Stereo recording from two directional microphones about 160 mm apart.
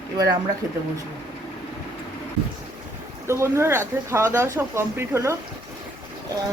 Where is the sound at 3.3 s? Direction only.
15° right (ahead or behind).